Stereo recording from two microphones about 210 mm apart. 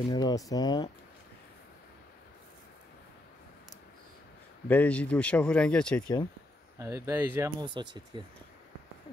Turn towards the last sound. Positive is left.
turn(degrees=-20)  # may be behind; listen again after turning